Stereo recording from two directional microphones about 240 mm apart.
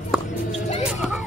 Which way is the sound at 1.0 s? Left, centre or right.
Centre.